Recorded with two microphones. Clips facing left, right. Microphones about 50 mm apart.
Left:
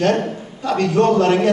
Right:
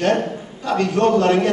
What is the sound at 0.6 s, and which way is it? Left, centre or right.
Speech, centre.